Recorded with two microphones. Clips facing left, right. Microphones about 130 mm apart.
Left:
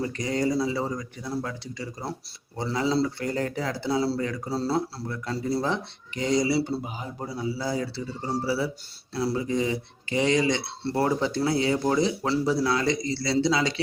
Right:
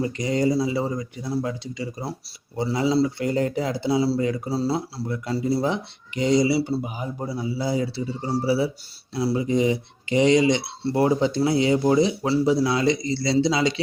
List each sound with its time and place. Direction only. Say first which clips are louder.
0.0 s speech: right 4 dB; 15° right (ahead or behind)